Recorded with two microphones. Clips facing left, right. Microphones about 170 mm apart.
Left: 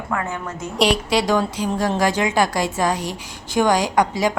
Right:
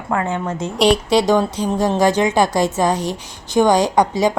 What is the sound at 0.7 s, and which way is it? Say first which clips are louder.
Speech: right 4 dB; centre (ahead or behind).